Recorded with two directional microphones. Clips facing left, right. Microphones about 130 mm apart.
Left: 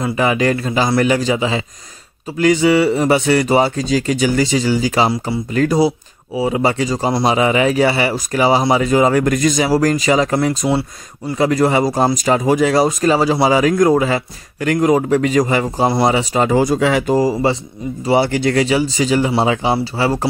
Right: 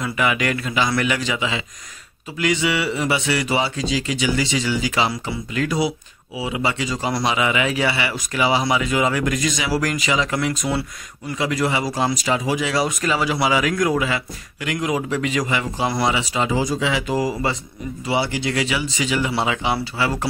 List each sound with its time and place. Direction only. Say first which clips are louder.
0.0 s speech: left 6 dB; 35° left (ahead or behind)
11.3 s speech: left 7 dB; 40° left (ahead or behind)
18.0 s speech: left 8 dB; 45° left (ahead or behind)